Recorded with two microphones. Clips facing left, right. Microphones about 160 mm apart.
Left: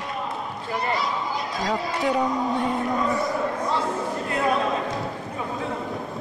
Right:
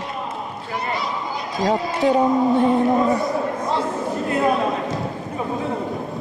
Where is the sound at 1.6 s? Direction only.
25° right (ahead or behind).